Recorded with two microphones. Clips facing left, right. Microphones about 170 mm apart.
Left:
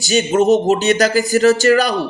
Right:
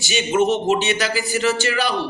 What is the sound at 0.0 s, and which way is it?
Speech, 40° left (ahead or behind).